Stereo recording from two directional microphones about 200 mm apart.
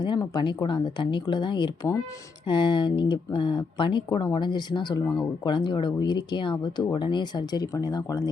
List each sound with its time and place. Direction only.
0.0 s speech: 20° left (ahead or behind)